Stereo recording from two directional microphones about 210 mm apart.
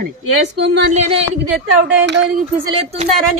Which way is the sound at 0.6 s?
55° right (ahead or behind).